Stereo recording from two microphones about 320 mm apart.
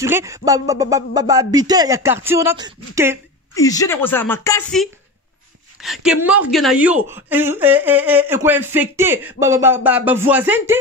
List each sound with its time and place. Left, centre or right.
0.0 s speech: centre
3.5 s a woman's voice: centre